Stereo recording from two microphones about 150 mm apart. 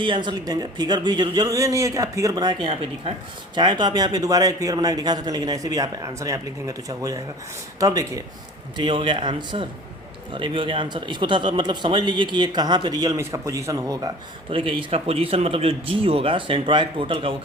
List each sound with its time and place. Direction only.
0.0 s speech: 30° right (ahead or behind)
8.8 s a man's voice: 35° right (ahead or behind)
14.8 s a man's voice: 40° right (ahead or behind)